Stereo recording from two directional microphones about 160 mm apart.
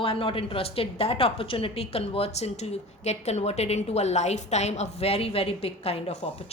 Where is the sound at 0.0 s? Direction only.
35° left (ahead or behind).